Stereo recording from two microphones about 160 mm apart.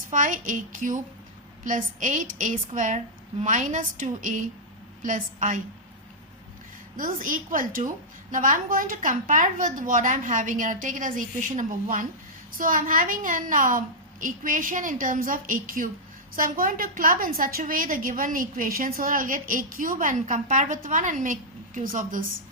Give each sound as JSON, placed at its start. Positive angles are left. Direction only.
{"t": 0.1, "sound": "a woman's voice", "side_deg": -55}
{"t": 6.9, "sound": "a woman's voice", "side_deg": -60}